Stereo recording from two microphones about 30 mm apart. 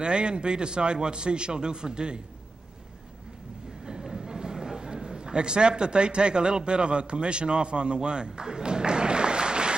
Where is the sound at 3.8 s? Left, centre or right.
Right.